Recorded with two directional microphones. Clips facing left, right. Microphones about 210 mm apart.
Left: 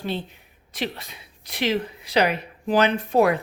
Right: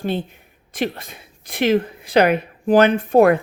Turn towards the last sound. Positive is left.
turn(degrees=-50)  # may be behind; listen again after turning